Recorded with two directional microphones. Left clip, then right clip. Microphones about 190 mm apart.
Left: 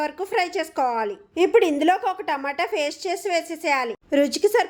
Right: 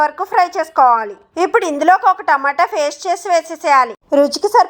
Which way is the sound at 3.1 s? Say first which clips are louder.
Right 9 dB; 55° right (ahead or behind).